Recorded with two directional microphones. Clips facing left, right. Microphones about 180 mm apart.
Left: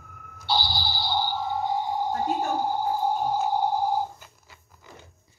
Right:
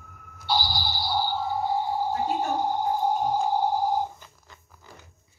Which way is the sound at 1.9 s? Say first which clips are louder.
Even; 10° right (ahead or behind).